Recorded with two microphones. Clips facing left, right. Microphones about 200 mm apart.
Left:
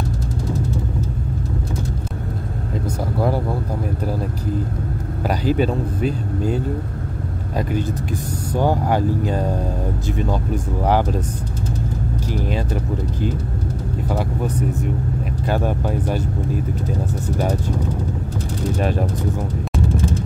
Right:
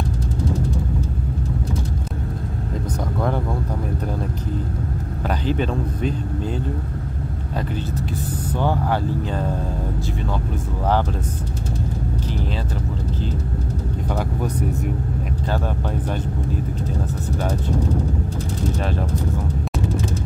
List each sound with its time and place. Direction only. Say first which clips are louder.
5.2 s speech: left 4 dB; 10° left (ahead or behind)
8.5 s speech: left 3 dB; 10° left (ahead or behind)
15.4 s speech: left 5 dB; 10° left (ahead or behind)
18.8 s speech: left 7 dB; 15° left (ahead or behind)